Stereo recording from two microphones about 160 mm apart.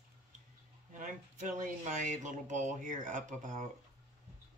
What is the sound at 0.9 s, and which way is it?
Speech, 55° right (ahead or behind).